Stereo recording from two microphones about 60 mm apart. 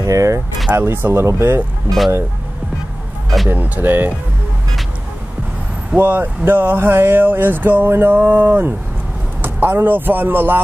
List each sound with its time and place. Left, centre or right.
0.0 s speech: right
0.7 s speech: right
1.9 s speech: centre
3.4 s speech: right
5.9 s speech: right